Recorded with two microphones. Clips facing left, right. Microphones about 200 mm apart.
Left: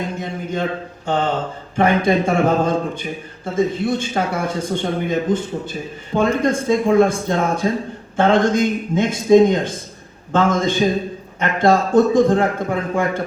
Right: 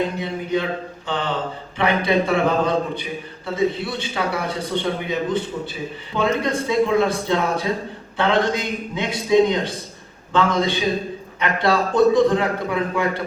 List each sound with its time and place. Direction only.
0.2 s speech: 45° left (ahead or behind)